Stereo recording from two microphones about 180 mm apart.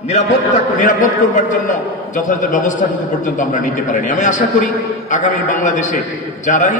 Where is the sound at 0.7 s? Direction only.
45° left (ahead or behind).